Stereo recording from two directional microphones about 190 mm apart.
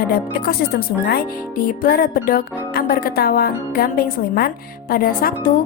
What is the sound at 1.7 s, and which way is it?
Music, 50° left (ahead or behind).